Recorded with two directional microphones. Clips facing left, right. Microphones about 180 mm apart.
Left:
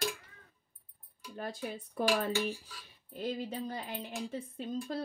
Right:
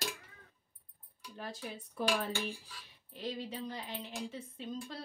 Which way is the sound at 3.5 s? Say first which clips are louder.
Left 3 dB; 50° left (ahead or behind).